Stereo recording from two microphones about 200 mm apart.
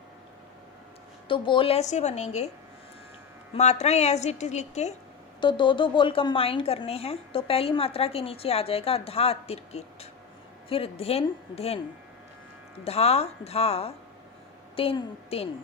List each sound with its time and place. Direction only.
1.3 s a woman's voice: 25° left (ahead or behind)
3.5 s a woman's voice: 35° left (ahead or behind)
5.4 s a woman's voice: 25° left (ahead or behind)
12.8 s a woman's voice: 30° left (ahead or behind)